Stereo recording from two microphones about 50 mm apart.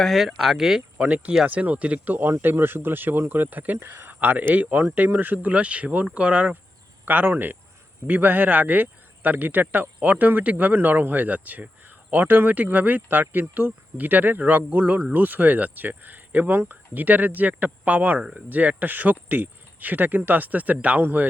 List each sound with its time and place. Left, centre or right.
0.0 s speech: centre
0.9 s speech: right
2.3 s speech: right
7.0 s a man's voice: right